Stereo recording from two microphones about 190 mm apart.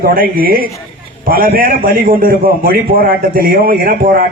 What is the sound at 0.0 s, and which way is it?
A man's voice, 50° right (ahead or behind).